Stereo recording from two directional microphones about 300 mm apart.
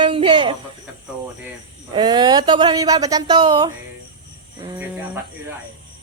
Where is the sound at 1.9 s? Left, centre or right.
Centre.